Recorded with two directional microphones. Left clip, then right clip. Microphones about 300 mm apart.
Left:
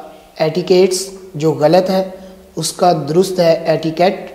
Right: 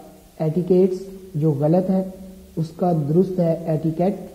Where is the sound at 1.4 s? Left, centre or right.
Centre.